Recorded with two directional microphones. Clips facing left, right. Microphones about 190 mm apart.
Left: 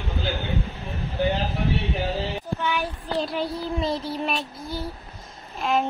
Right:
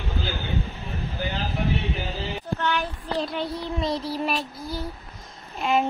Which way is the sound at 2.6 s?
10° left (ahead or behind).